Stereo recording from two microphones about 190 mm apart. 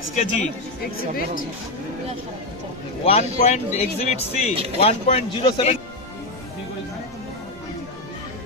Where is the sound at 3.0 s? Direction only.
35° left (ahead or behind).